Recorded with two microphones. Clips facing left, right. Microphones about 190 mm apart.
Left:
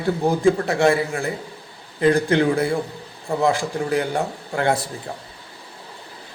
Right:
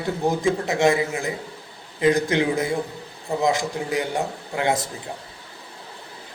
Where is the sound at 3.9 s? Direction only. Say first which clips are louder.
Left 2 dB; 15° right (ahead or behind).